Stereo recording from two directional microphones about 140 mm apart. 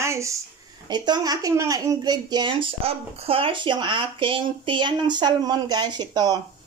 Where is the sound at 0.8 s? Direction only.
30° right (ahead or behind).